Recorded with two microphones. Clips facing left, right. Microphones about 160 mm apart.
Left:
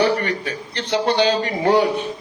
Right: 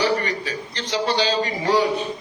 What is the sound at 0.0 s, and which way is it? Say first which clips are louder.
A man's voice: left 3 dB; 60° left (ahead or behind).